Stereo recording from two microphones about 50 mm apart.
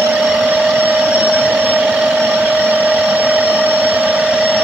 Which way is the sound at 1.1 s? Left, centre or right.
Right.